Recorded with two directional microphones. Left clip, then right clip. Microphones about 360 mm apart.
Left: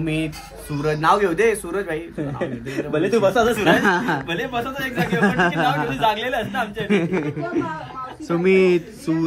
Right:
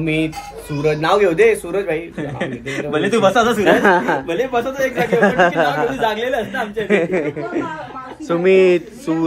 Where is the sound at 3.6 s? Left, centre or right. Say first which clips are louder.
Right 4 dB; centre.